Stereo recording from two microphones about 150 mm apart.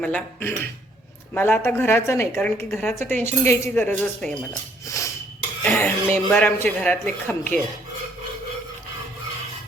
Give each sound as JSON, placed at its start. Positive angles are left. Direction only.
{"t": 0.0, "sound": "speech", "side_deg": 5}
{"t": 4.9, "sound": "dishes", "side_deg": 20}
{"t": 5.6, "sound": "speech", "side_deg": 15}